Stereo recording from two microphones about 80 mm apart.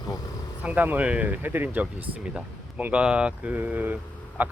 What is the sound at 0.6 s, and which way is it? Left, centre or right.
Speech, centre.